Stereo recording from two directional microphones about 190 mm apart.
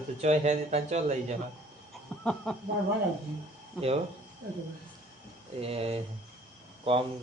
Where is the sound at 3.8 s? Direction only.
30° right (ahead or behind).